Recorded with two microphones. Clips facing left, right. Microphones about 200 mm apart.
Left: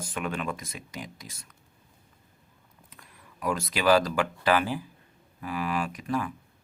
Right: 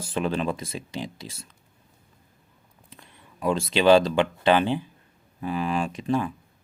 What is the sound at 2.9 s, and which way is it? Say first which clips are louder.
Speech: right 4 dB; 25° right (ahead or behind).